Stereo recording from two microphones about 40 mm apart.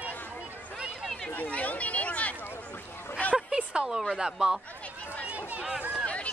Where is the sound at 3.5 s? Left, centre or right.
Right.